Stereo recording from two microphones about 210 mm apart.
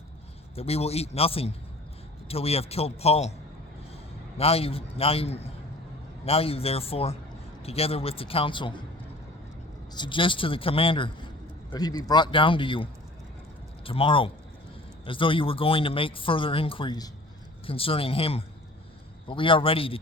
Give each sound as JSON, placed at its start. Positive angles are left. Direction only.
{"t": 0.5, "sound": "speech", "side_deg": 30}
{"t": 4.4, "sound": "speech", "side_deg": 30}
{"t": 9.9, "sound": "speech", "side_deg": 20}